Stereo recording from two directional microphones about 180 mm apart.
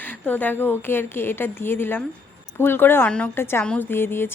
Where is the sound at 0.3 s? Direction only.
10° left (ahead or behind).